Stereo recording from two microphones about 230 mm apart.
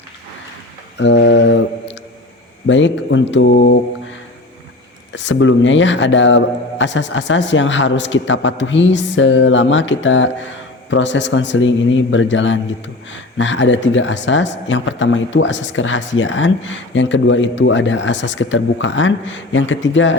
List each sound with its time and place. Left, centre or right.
0.9 s a man's voice: left
2.6 s a man's voice: left
5.1 s a man's voice: left